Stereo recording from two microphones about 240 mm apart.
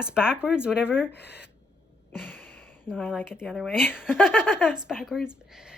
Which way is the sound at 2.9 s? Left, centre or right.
Centre.